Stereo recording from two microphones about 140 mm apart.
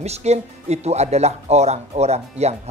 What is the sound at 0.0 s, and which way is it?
Speech, 50° right (ahead or behind).